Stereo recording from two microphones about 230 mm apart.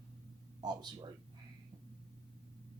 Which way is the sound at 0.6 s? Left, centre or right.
Centre.